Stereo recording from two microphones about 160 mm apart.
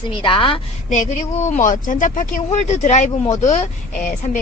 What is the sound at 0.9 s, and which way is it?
Speech, 50° left (ahead or behind).